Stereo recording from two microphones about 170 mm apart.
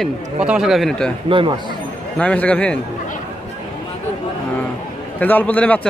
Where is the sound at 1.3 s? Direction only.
30° right (ahead or behind).